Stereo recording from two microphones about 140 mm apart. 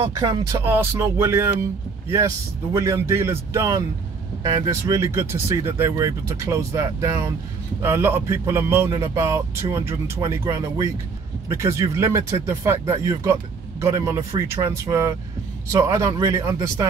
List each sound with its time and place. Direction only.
0.0 s speech: 30° right (ahead or behind)